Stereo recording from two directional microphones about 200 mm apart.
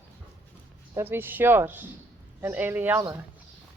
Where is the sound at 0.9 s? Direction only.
10° right (ahead or behind).